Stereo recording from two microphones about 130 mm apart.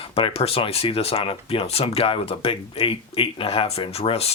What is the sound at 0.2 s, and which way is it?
Speech, 45° left (ahead or behind).